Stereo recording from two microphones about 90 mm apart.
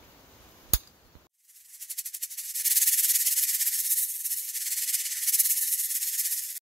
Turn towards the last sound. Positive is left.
turn(degrees=0)  # may be behind; listen again after turning